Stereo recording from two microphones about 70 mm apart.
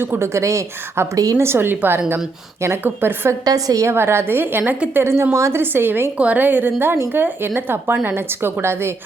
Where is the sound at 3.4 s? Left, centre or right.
Right.